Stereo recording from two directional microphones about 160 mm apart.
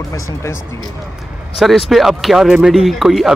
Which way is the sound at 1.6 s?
Centre (ahead or behind).